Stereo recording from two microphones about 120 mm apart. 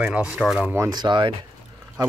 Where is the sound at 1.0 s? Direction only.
40° right (ahead or behind).